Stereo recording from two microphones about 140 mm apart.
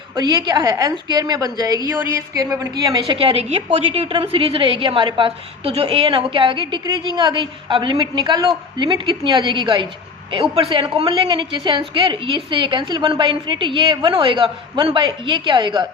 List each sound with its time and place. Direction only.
0.2 s a woman's voice: 30° right (ahead or behind)
3.2 s a woman's voice: 45° right (ahead or behind)